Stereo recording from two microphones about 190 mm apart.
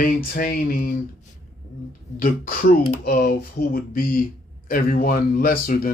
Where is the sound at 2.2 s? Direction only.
45° left (ahead or behind).